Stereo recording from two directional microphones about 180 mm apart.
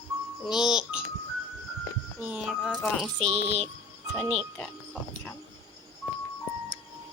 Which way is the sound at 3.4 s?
35° right (ahead or behind).